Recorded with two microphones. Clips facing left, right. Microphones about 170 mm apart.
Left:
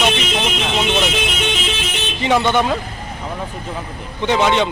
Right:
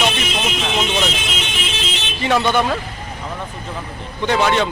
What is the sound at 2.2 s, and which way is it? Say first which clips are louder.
Speech: left 1 dB; 20° left (ahead or behind).